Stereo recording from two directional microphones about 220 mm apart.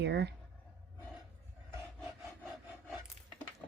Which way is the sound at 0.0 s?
50° right (ahead or behind).